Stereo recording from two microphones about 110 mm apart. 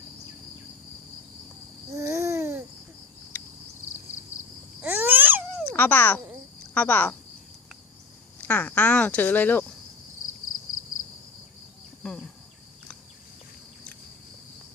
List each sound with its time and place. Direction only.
2.0 s babbling: 30° right (ahead or behind)
4.8 s babbling: 15° right (ahead or behind)
5.7 s speech: 15° left (ahead or behind)
8.4 s speech: 15° left (ahead or behind)